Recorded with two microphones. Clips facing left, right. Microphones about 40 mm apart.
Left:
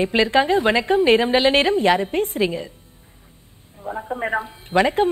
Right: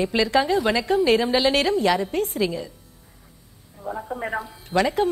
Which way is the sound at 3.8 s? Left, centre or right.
Centre.